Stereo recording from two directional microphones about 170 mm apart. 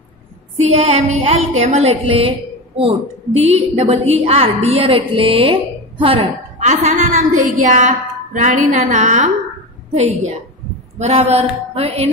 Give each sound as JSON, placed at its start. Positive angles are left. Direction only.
{"t": 0.7, "sound": "a woman's voice", "side_deg": -40}
{"t": 11.0, "sound": "a woman's voice", "side_deg": -40}